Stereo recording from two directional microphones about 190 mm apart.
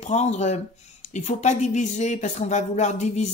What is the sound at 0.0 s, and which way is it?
Speech, 35° left (ahead or behind).